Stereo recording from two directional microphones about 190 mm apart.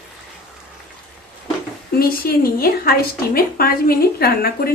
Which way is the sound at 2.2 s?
50° left (ahead or behind).